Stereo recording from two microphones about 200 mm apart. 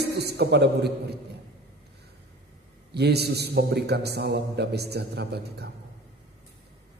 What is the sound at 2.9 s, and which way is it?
A man's voice, 55° right (ahead or behind).